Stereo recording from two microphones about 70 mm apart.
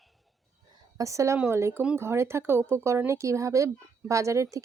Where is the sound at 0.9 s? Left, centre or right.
Right.